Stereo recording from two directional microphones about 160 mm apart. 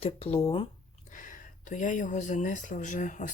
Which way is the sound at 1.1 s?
55° left (ahead or behind).